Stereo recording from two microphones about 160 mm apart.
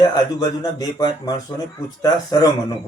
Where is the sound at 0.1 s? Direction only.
25° left (ahead or behind).